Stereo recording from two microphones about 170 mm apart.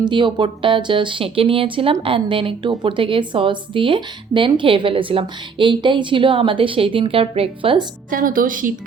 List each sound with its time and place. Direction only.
0.0 s speech: 30° right (ahead or behind)
8.1 s speech: 55° right (ahead or behind)